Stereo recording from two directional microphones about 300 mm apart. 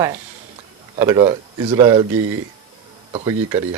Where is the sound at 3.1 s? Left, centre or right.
Centre.